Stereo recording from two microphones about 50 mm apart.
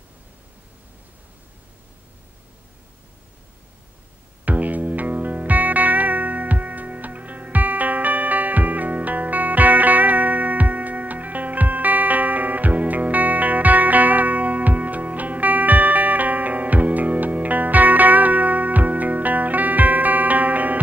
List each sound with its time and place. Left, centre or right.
4.5 s music: right